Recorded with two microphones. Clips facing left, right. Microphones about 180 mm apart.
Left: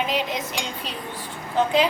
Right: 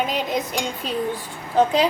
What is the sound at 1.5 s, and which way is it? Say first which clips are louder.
Speech: right 2 dB; 40° right (ahead or behind).